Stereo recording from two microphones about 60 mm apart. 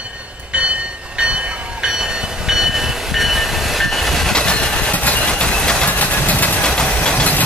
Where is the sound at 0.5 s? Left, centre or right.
Centre.